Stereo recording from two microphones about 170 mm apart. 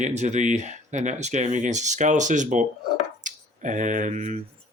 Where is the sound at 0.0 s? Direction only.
45° right (ahead or behind).